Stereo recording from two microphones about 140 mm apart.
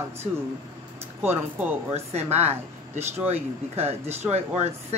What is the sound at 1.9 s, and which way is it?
Speech, 50° right (ahead or behind).